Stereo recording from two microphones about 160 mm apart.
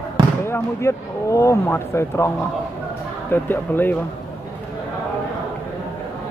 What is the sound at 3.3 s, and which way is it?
Speech, 10° left (ahead or behind).